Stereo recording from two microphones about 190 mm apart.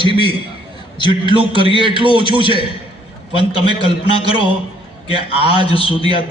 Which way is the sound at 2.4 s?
25° left (ahead or behind).